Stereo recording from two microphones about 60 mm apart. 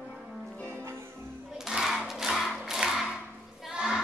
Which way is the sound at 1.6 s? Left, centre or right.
Centre.